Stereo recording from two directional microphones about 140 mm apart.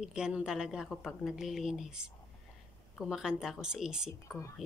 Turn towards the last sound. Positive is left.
turn(degrees=20)  # may be behind; listen again after turning